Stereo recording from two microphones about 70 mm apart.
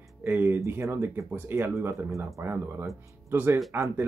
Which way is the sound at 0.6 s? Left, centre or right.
Right.